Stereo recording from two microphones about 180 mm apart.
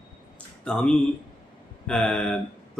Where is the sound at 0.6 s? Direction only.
5° left (ahead or behind).